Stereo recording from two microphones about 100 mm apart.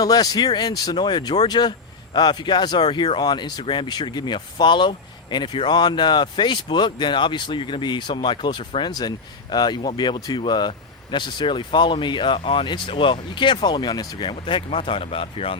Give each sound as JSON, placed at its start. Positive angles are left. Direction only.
{"t": 0.0, "sound": "speech", "side_deg": 40}
{"t": 10.4, "sound": "speech", "side_deg": 50}
{"t": 14.3, "sound": "speech", "side_deg": 60}